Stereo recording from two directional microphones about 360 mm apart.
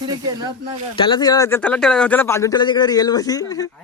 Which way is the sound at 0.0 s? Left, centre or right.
Centre.